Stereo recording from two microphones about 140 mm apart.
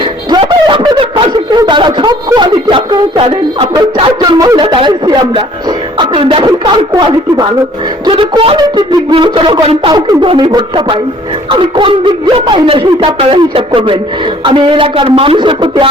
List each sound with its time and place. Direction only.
0.3 s a sound: 35° right (ahead or behind)
3.9 s a woman's voice: 35° right (ahead or behind)
8.0 s speech: 40° right (ahead or behind)
9.9 s speech: 30° right (ahead or behind)